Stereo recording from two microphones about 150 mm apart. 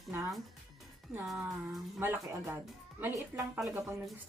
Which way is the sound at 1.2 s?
Centre (ahead or behind).